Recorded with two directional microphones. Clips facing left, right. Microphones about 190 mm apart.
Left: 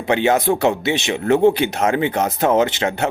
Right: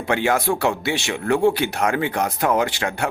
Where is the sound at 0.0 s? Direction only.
20° left (ahead or behind).